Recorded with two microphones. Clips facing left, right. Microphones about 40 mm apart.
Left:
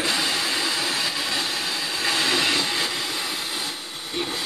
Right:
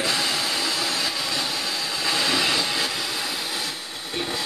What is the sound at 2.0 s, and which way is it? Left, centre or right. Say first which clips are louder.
Train: left 1 dB; left.